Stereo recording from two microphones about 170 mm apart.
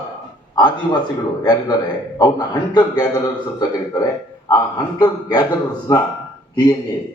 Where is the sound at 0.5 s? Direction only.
25° left (ahead or behind).